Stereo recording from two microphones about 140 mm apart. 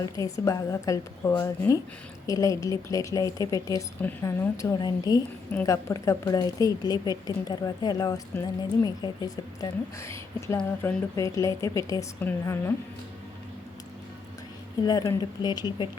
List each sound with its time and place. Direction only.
0.0 s a woman's voice: 25° left (ahead or behind)
14.8 s speech: 25° left (ahead or behind)